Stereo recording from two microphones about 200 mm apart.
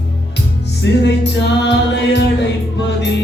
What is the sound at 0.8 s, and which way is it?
Music, 60° left (ahead or behind).